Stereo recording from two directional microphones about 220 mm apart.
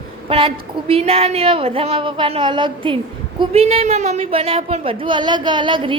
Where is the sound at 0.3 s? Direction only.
25° right (ahead or behind).